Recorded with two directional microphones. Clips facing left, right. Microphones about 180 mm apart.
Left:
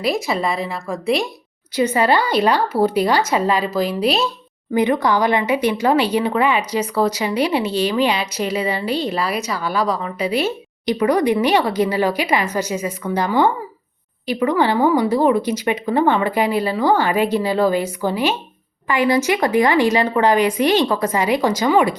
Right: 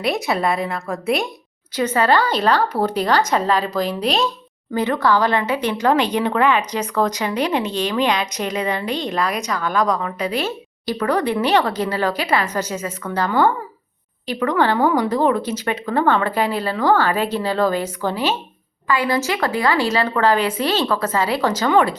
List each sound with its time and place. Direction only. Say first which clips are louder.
0.0 s speech: even; centre (ahead or behind)
1.7 s speech: left 1 dB; 10° left (ahead or behind)